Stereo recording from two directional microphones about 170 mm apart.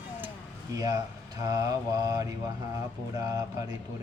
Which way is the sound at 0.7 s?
20° right (ahead or behind).